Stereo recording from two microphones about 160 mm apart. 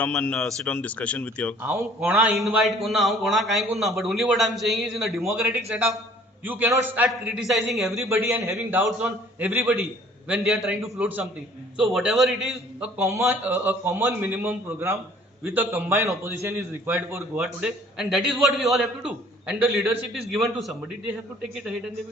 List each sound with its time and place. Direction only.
0.0 s speech: 10° left (ahead or behind)
1.6 s a man's voice: 20° right (ahead or behind)
2.3 s a man's voice: centre (ahead or behind)
6.4 s a man's voice: 10° right (ahead or behind)
8.1 s a man's voice: 20° right (ahead or behind); by 12.5 s centre (ahead or behind)
13.0 s a man's voice: 20° right (ahead or behind)
17.4 s a man's voice: 5° right (ahead or behind)